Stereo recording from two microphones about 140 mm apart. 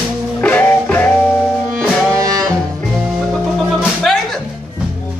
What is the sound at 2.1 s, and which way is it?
Music, 25° right (ahead or behind).